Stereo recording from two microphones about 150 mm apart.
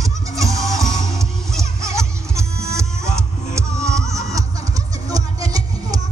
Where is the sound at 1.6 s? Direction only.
20° right (ahead or behind).